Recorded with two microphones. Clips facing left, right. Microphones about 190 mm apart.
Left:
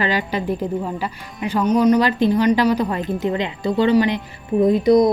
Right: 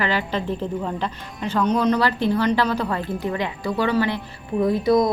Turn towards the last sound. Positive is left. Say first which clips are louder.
# left 4 dB
turn(degrees=20)  # may be behind; listen again after turning